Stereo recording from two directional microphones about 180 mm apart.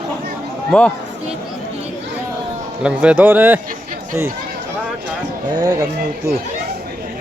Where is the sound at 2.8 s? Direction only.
5° right (ahead or behind).